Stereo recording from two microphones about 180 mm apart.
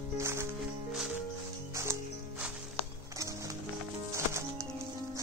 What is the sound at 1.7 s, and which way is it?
Music, 15° right (ahead or behind).